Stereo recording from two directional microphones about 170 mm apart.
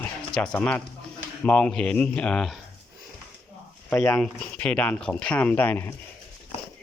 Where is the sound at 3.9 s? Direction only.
10° left (ahead or behind).